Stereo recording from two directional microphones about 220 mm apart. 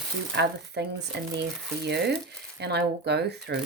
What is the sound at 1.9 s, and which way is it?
Speech, 50° right (ahead or behind).